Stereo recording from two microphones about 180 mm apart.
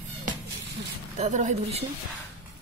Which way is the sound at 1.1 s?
40° right (ahead or behind).